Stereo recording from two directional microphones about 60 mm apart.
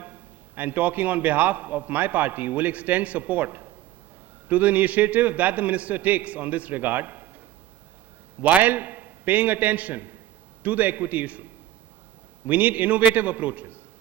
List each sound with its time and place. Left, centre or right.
0.0 s a man's voice: right
8.4 s a man's voice: right